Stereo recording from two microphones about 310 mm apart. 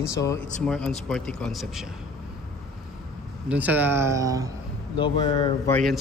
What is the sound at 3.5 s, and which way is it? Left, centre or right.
Speech, centre.